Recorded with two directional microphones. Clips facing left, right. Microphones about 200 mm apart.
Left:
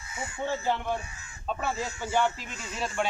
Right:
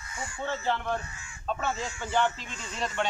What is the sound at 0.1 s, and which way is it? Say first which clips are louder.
A man's voice: left 2 dB; 15° left (ahead or behind).